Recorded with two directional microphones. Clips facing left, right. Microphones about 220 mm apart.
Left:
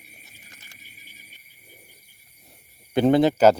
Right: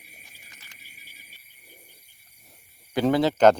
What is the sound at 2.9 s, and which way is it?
Speech, 20° left (ahead or behind).